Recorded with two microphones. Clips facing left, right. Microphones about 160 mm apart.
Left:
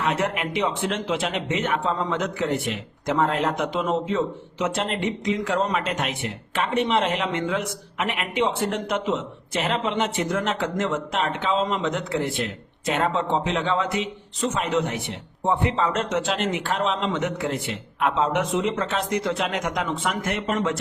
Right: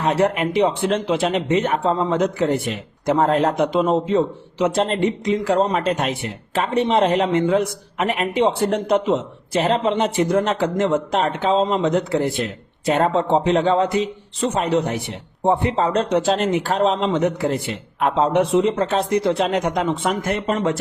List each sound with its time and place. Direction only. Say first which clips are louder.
0.0 s a man's voice: right 6 dB; 35° right (ahead or behind)